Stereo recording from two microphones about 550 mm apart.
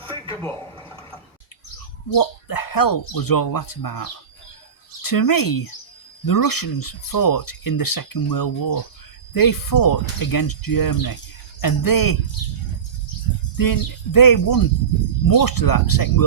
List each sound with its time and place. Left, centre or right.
0.1 s a sound: centre
2.0 s speech: left
13.6 s speech: left